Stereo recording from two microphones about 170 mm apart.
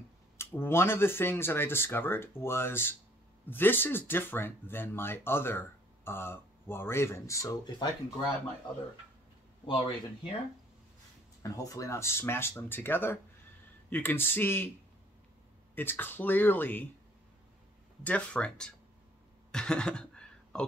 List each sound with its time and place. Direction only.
0.4 s speech: 15° left (ahead or behind)
9.7 s speech: 30° left (ahead or behind)
11.4 s speech: 20° left (ahead or behind)
15.7 s speech: 10° left (ahead or behind)
18.0 s speech: 5° left (ahead or behind)
19.5 s a sound: 5° left (ahead or behind)